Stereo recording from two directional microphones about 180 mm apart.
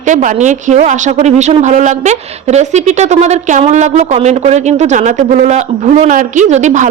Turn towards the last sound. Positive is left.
turn(degrees=-40)  # may be behind; listen again after turning